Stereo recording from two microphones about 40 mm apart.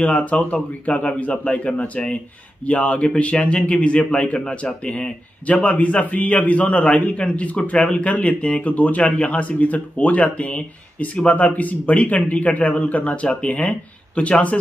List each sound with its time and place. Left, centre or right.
0.0 s a man's voice: left
5.5 s a man's voice: left